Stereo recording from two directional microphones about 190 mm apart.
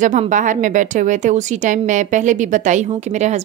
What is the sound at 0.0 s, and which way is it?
Speech, 40° right (ahead or behind).